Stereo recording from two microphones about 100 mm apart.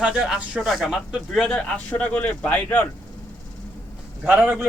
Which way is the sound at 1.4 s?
10° left (ahead or behind).